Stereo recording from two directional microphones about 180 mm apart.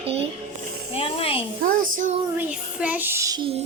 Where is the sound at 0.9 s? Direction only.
30° left (ahead or behind).